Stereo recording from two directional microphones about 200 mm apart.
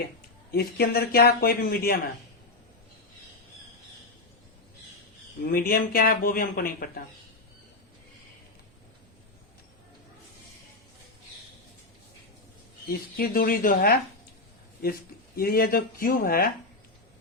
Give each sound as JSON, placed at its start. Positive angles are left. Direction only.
{"t": 0.5, "sound": "speech", "side_deg": 50}
{"t": 5.5, "sound": "speech", "side_deg": 50}
{"t": 12.9, "sound": "speech", "side_deg": 45}
{"t": 15.4, "sound": "speech", "side_deg": 50}